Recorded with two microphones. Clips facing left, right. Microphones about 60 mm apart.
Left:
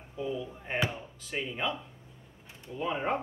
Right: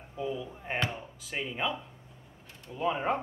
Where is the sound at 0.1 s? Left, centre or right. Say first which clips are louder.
Even; centre.